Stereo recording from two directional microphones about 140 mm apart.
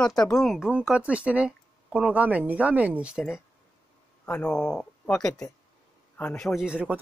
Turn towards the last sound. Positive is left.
turn(degrees=-10)  # may be behind; listen again after turning